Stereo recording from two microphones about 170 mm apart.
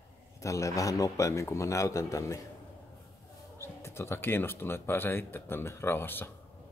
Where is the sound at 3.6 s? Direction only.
15° left (ahead or behind).